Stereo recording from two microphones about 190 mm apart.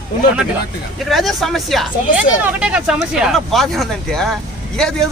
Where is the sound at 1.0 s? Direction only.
Centre (ahead or behind).